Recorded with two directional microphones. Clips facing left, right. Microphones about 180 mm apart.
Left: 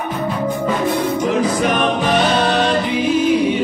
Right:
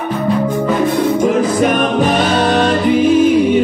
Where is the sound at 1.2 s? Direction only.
50° right (ahead or behind).